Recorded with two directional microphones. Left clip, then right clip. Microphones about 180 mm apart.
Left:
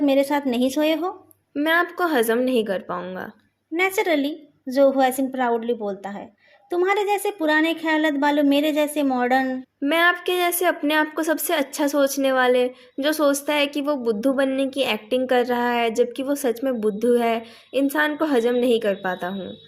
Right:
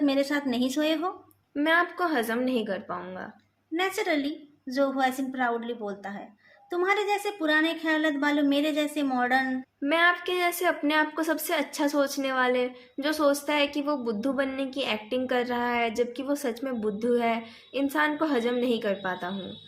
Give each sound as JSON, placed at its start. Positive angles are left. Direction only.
{"t": 0.0, "sound": "speech", "side_deg": 30}